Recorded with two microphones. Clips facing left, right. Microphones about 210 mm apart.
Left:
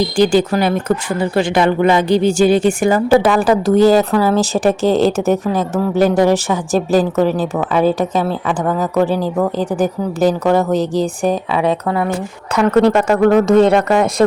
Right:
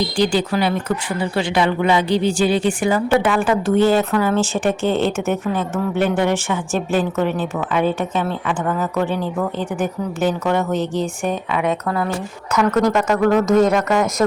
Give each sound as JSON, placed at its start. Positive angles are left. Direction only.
{"t": 0.2, "sound": "speech", "side_deg": 45}